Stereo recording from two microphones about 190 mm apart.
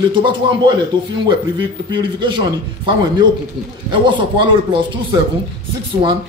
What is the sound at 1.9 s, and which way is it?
Speech, 25° right (ahead or behind).